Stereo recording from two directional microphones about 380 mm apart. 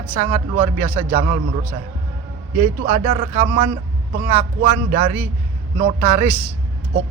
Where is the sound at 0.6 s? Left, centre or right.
Centre.